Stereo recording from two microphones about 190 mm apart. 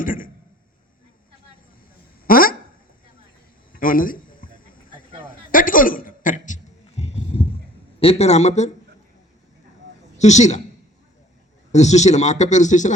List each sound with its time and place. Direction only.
0.0 s a man's voice: 45° left (ahead or behind)
2.2 s a sound: 50° left (ahead or behind)
3.7 s a sound: 45° left (ahead or behind)
7.9 s speech: 30° left (ahead or behind)
10.2 s speech: 35° left (ahead or behind)
11.7 s speech: 35° left (ahead or behind)